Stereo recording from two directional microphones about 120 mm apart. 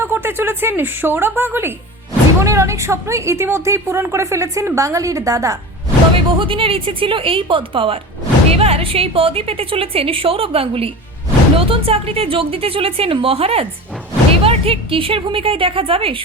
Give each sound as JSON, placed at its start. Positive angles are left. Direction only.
{"t": 0.0, "sound": "a woman's voice", "side_deg": -20}
{"t": 6.1, "sound": "a woman's voice", "side_deg": -45}
{"t": 8.4, "sound": "a woman's voice", "side_deg": -55}